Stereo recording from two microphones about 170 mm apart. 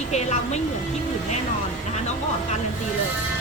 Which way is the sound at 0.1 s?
40° left (ahead or behind).